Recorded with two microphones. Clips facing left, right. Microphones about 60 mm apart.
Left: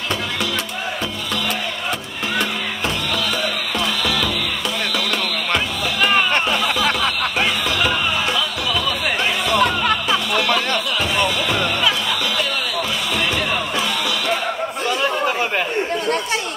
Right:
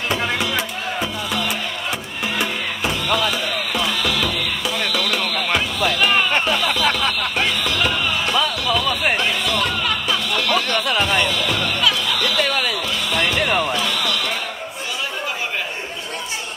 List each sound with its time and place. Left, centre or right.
3.1 s music: centre
9.6 s music: left
10.0 s music: centre
10.9 s music: right
11.5 s music: left
13.4 s music: right